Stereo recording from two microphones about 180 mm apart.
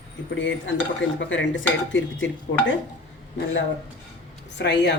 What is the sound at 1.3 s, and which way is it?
Speech, 90° left.